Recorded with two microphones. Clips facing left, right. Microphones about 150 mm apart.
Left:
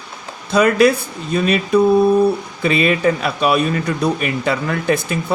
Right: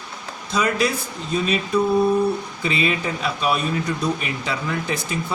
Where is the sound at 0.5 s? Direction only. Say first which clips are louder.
Left 9 dB; 60° left (ahead or behind).